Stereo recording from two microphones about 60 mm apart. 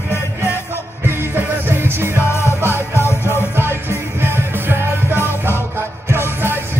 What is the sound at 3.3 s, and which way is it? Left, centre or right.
Music, right.